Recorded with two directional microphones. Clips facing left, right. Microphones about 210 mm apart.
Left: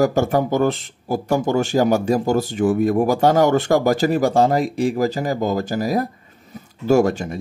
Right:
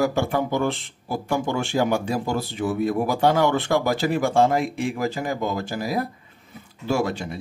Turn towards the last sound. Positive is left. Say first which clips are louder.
# left 8 dB
turn(degrees=45)  # may be behind; listen again after turning